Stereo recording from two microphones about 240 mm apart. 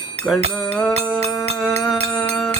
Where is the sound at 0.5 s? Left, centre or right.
Centre.